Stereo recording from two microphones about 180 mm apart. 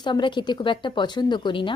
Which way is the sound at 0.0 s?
25° left (ahead or behind).